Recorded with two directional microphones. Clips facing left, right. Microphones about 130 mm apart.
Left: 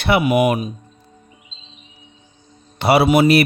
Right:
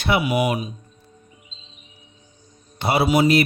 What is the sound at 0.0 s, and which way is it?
Speech, 60° left (ahead or behind).